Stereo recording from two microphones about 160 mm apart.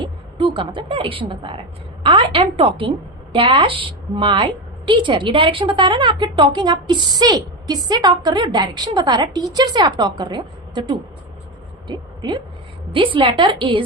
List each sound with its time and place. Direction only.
0.0 s a woman's voice: 30° right (ahead or behind)